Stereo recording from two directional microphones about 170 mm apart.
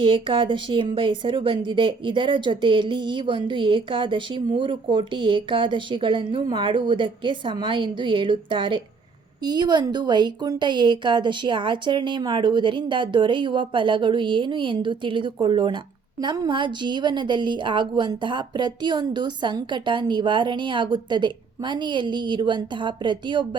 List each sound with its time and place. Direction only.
0.0 s a woman's voice: 30° right (ahead or behind)